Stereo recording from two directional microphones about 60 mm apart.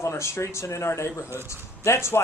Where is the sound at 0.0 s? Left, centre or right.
Left.